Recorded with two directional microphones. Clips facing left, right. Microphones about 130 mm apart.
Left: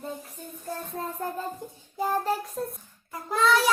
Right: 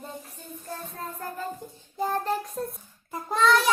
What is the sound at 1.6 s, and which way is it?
Child singing, 15° left (ahead or behind).